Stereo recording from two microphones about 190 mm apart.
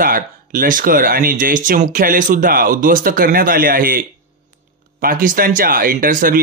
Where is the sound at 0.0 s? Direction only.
50° right (ahead or behind).